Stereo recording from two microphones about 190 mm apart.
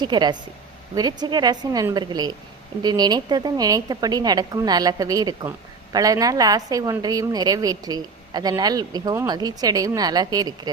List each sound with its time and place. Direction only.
0.0 s a woman's voice: 25° right (ahead or behind)